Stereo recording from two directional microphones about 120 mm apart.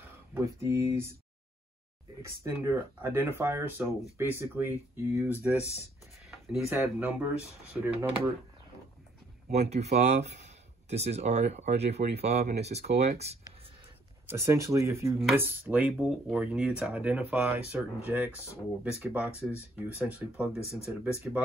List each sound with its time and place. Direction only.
0.3 s speech: 25° right (ahead or behind)
2.2 s speech: 25° right (ahead or behind)
6.2 s a sound: centre (ahead or behind)
6.7 s speech: 15° right (ahead or behind)
9.5 s speech: 65° right (ahead or behind)
14.2 s speech: 25° right (ahead or behind)
20.0 s speech: 10° right (ahead or behind)